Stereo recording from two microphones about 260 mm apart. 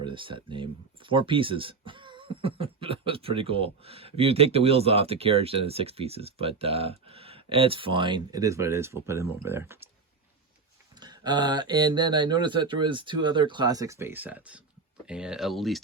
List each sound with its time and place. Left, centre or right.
0.0 s speech: centre
11.0 s speech: centre